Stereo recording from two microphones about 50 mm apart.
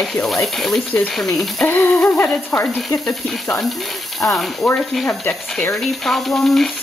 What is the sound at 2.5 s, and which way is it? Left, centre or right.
Speech, left.